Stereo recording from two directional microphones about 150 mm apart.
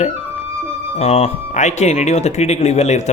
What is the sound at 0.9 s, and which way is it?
Speech, 45° left (ahead or behind).